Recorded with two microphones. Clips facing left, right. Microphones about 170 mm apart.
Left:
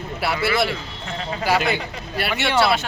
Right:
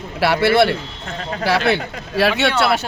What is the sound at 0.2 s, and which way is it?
A man's voice, 70° right (ahead or behind).